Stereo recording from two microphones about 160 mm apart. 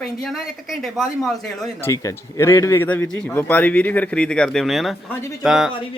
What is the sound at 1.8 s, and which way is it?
Speech, 20° left (ahead or behind).